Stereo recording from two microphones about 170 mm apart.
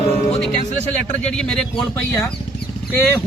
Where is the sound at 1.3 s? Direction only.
5° left (ahead or behind).